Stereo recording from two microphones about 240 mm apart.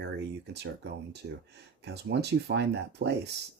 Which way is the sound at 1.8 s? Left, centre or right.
Right.